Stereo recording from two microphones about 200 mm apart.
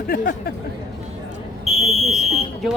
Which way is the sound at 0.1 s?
50° left (ahead or behind).